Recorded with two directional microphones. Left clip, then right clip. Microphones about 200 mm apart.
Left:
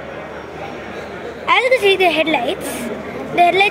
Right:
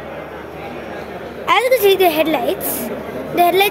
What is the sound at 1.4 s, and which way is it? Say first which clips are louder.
A woman's voice: even; 15° right (ahead or behind).